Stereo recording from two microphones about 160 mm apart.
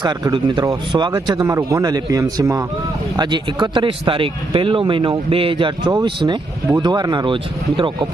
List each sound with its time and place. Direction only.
0.0 s a man's voice: 25° right (ahead or behind)